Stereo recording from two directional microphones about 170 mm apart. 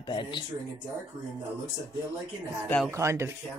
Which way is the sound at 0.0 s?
25° left (ahead or behind).